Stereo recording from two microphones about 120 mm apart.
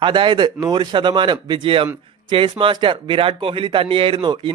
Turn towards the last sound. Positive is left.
turn(degrees=-40)  # may be behind; listen again after turning